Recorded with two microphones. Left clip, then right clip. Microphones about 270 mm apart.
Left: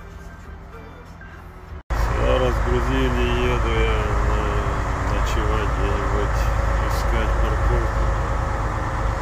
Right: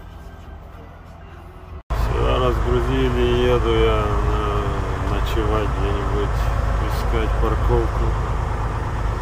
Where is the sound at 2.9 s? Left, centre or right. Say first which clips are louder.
Right 2 dB; centre.